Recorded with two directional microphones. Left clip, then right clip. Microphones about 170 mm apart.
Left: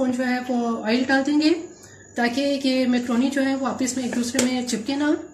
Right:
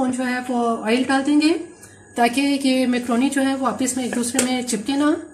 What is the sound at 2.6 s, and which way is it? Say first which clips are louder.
A woman's voice: right 2 dB; 45° right (ahead or behind).